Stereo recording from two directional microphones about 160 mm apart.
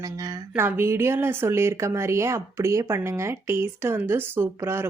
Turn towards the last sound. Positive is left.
turn(degrees=-15)  # may be behind; listen again after turning